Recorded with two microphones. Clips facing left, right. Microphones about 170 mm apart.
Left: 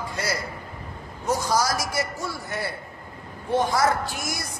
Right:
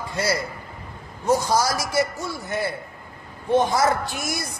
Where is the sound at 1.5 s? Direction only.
25° right (ahead or behind).